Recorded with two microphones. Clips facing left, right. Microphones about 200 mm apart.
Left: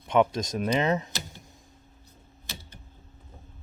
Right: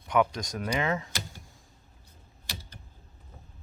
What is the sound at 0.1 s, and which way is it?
Speech, 25° left (ahead or behind).